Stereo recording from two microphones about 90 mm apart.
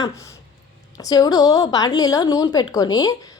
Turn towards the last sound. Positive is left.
turn(degrees=45)  # may be behind; listen again after turning